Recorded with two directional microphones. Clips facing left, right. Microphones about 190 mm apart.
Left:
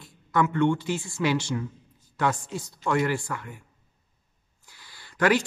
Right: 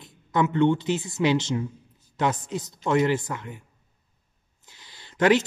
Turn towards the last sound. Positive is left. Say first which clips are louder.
# right 3 dB
turn(degrees=-20)  # may be behind; listen again after turning